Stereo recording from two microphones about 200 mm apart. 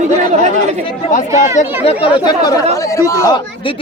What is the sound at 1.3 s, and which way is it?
Speech, 35° left (ahead or behind).